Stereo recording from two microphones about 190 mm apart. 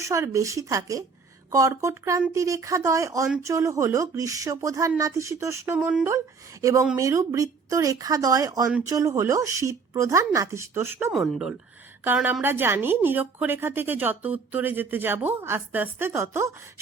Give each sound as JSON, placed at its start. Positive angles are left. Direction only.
{"t": 0.0, "sound": "a woman's voice", "side_deg": -15}
{"t": 6.1, "sound": "a woman's voice", "side_deg": -15}
{"t": 11.1, "sound": "a woman's voice", "side_deg": 0}